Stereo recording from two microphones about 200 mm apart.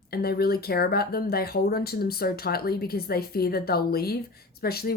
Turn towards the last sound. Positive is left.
turn(degrees=50)  # may be behind; listen again after turning